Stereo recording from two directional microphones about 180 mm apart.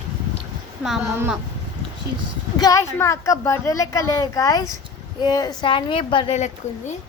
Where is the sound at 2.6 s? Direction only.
20° left (ahead or behind); by 6.9 s 40° left (ahead or behind).